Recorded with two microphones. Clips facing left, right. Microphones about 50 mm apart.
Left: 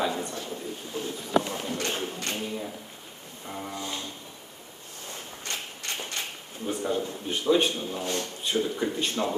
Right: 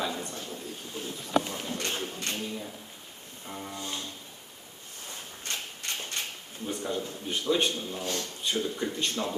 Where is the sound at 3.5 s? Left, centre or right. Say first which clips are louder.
Left 3 dB; centre.